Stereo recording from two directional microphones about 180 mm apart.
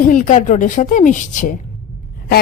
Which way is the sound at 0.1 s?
45° left (ahead or behind).